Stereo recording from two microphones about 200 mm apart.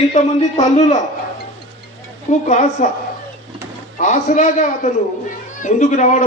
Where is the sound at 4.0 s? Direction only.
35° left (ahead or behind).